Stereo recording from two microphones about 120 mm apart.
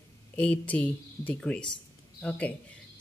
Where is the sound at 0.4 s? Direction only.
10° left (ahead or behind).